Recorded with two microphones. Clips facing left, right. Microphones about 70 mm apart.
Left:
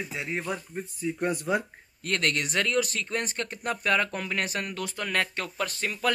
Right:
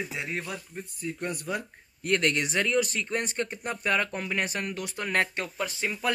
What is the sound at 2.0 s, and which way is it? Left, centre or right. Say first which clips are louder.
Speech: right 2 dB; centre.